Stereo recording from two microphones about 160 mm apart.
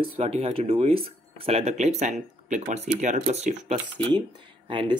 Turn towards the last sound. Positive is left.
turn(degrees=-30)  # may be behind; listen again after turning